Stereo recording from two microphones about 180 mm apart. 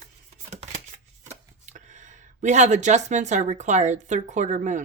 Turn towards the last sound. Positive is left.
turn(degrees=-45)  # may be behind; listen again after turning